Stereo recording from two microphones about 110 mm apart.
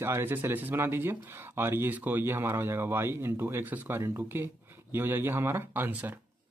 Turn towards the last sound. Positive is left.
turn(degrees=-15)  # may be behind; listen again after turning